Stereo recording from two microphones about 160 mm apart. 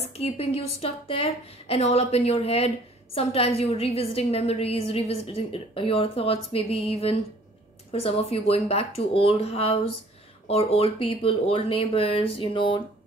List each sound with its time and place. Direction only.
0.0 s a woman's voice: 40° left (ahead or behind)